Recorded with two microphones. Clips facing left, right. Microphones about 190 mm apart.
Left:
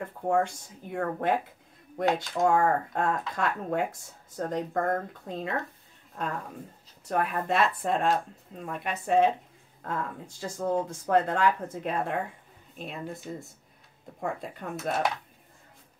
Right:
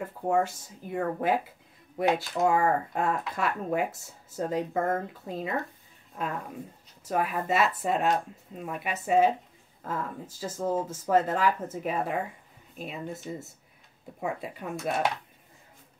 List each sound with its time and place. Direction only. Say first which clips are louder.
0.0 s speech: even; 5° right (ahead or behind)